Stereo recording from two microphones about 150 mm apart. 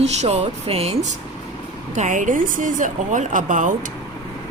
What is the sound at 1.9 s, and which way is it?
A woman's voice, 55° right (ahead or behind).